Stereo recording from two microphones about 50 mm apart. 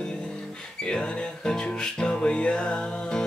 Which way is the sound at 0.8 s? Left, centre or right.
Centre.